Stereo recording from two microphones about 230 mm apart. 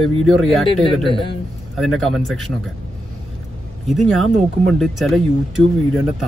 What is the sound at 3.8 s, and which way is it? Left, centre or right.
Speech, centre.